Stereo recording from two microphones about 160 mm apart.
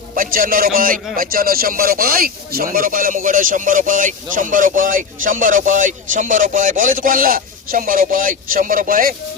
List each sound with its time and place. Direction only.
0.2 s speech: 60° right (ahead or behind)